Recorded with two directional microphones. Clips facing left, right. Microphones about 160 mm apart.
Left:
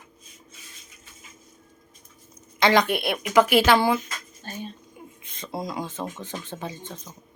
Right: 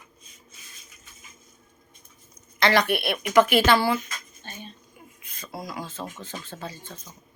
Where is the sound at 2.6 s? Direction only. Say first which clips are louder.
Left 2 dB; 15° left (ahead or behind).